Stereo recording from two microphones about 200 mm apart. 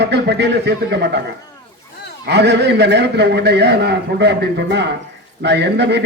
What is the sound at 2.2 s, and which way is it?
A man's voice, 60° right (ahead or behind).